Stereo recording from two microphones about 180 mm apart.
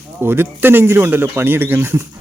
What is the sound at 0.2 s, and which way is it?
Speech, 10° right (ahead or behind).